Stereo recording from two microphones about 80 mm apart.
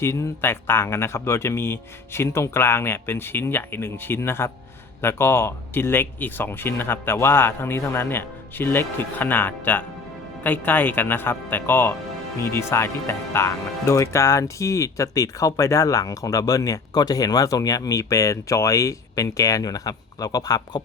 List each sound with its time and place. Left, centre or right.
0.0 s speech: left